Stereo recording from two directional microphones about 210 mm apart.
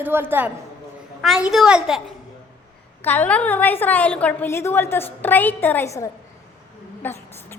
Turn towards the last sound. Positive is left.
turn(degrees=10)  # may be behind; listen again after turning